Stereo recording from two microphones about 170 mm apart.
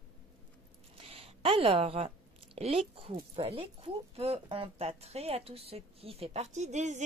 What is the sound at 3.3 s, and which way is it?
Speech, 35° right (ahead or behind).